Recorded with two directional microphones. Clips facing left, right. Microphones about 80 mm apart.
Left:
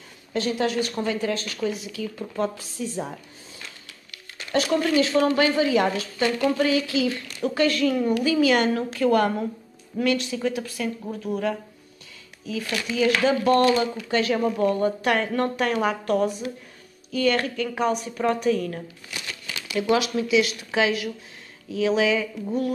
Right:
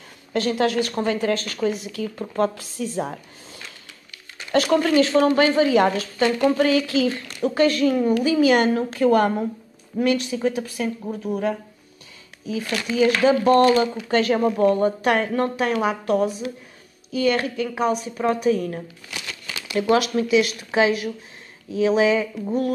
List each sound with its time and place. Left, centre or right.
0.3 s speech: right
4.6 s speech: right
5.1 s a woman's voice: right
7.4 s a woman's voice: right
11.1 s a woman's voice: centre
12.6 s speech: right
12.9 s a woman's voice: right
15.3 s a woman's voice: centre
18.5 s a woman's voice: right
19.7 s a woman's voice: right